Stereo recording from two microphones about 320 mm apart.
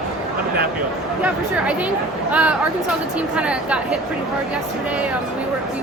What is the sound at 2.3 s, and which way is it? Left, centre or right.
A woman's voice, centre.